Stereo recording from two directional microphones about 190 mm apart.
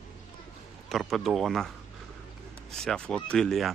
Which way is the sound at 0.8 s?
Centre (ahead or behind).